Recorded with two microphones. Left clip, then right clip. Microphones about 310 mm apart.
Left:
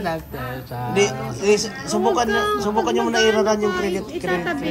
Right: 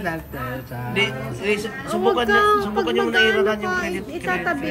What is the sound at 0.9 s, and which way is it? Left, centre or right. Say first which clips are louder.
Speech: left 2 dB; centre.